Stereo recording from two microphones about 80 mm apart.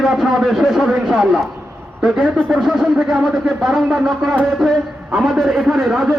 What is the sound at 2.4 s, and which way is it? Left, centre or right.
Speech, centre.